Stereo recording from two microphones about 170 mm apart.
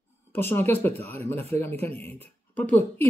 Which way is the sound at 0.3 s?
15° left (ahead or behind).